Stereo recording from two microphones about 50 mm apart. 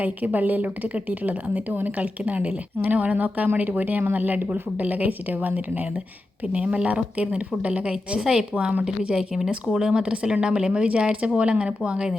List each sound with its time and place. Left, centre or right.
0.0 s speech: right
8.2 s speech: centre